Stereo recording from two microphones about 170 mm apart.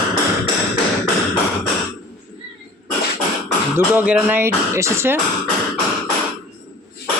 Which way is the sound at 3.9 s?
10° right (ahead or behind).